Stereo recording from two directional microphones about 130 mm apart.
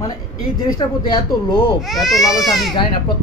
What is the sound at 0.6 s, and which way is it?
Speech, 30° left (ahead or behind).